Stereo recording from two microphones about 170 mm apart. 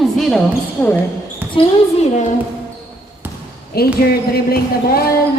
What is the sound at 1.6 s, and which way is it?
Speech, 30° left (ahead or behind).